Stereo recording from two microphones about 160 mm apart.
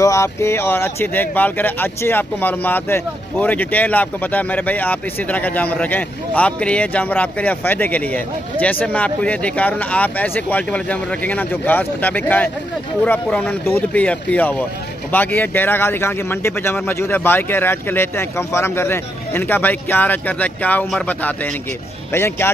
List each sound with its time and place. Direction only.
0.0 s speech: 20° left (ahead or behind)